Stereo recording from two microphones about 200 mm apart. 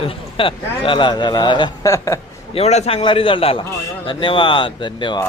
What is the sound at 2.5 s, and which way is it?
A man's voice, 30° left (ahead or behind).